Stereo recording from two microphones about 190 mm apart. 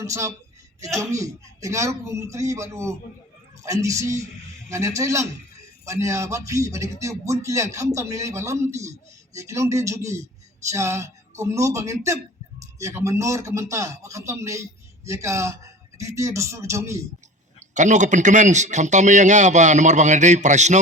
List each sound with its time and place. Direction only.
0.0 s a man's voice: 15° right (ahead or behind)
17.6 s a man's voice: 40° right (ahead or behind)